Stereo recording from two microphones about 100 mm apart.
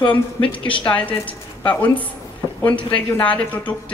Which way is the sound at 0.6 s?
60° left (ahead or behind).